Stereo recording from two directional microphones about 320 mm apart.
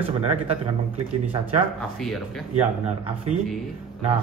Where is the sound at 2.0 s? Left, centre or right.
Centre.